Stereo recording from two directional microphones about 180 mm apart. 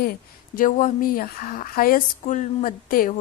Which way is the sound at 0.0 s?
50° left (ahead or behind).